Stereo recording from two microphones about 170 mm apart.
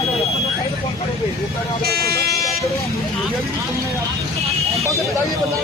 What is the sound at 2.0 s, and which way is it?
Vehicle, 65° right (ahead or behind).